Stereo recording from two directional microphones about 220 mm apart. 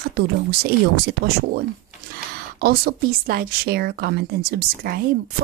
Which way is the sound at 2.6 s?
45° right (ahead or behind).